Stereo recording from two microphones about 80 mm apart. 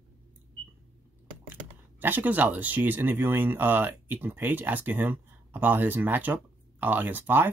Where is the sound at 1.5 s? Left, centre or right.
Right.